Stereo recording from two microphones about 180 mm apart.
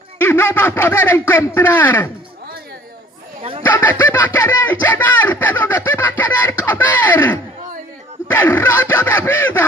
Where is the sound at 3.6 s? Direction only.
10° left (ahead or behind).